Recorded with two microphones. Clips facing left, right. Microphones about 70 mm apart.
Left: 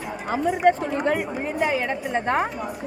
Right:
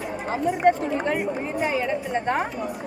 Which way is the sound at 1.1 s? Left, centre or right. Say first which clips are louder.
Left 1 dB; left.